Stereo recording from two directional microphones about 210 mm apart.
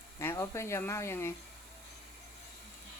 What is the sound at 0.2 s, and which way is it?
Speech, 15° left (ahead or behind).